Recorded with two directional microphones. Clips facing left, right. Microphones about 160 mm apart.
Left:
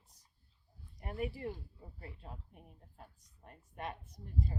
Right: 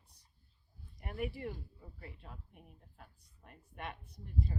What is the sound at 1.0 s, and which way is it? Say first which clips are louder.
Speech: left 1 dB; 30° left (ahead or behind).